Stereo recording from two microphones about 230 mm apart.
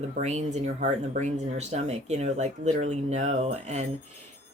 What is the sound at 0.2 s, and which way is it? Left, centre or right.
Speech, right.